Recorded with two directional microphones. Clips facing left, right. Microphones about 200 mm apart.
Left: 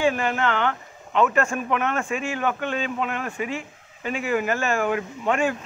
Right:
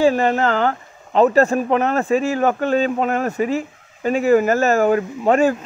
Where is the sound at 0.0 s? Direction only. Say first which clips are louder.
Right 6 dB; 35° right (ahead or behind).